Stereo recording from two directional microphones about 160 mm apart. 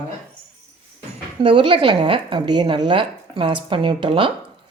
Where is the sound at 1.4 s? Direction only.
30° right (ahead or behind).